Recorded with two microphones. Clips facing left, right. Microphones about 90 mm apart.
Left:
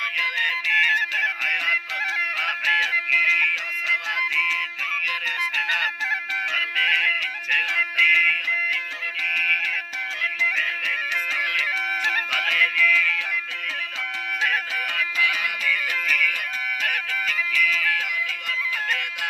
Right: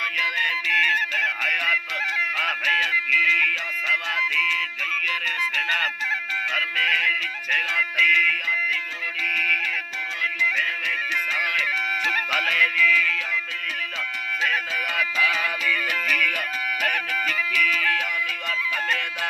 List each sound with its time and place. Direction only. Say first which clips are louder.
0.4 s music: left 1 dB; 5° right (ahead or behind); by 5.9 s 15° left (ahead or behind)
6.5 s music: even; 5° right (ahead or behind)
12.3 s music: right 1 dB; 5° right (ahead or behind)
14.9 s music: right 2 dB; 30° right (ahead or behind)
15.6 s music: right 1 dB; 45° right (ahead or behind)